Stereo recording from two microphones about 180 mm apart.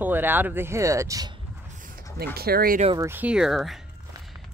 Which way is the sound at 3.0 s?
10° right (ahead or behind).